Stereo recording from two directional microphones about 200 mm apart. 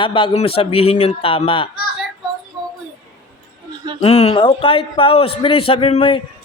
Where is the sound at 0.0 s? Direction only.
25° left (ahead or behind).